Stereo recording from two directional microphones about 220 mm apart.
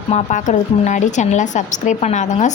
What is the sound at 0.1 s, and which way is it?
A woman's voice, 35° left (ahead or behind).